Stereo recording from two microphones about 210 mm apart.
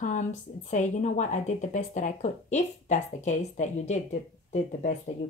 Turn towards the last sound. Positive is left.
turn(degrees=35)  # may be behind; listen again after turning